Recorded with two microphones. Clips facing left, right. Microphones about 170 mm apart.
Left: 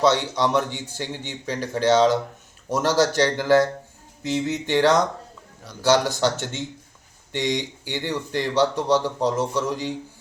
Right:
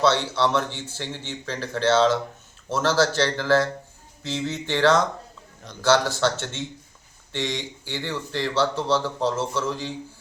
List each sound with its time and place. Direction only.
0.0 s speech: 15° left (ahead or behind)